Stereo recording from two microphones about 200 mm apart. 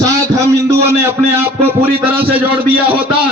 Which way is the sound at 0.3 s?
15° right (ahead or behind).